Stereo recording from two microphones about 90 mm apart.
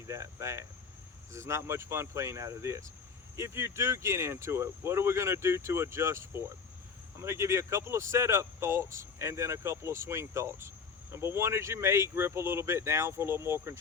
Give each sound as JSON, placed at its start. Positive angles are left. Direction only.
{"t": 0.1, "sound": "speech", "side_deg": -30}